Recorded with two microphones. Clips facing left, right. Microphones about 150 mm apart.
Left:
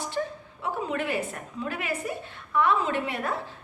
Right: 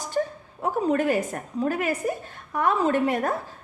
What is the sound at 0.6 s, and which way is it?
A woman's voice, 40° right (ahead or behind).